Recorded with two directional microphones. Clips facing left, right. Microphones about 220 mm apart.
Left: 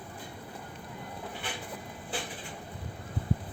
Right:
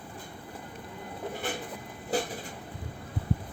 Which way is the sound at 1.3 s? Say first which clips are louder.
Right 8 dB; 45° right (ahead or behind).